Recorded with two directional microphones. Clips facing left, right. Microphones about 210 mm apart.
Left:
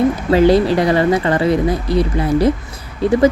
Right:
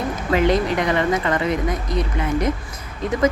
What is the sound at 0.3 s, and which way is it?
Speech, 35° left (ahead or behind).